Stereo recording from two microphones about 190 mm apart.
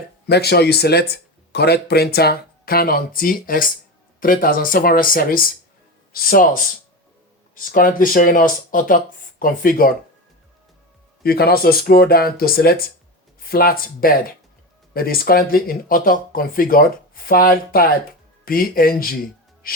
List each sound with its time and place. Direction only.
0.3 s speech: 60° left (ahead or behind)
11.2 s speech: 55° left (ahead or behind)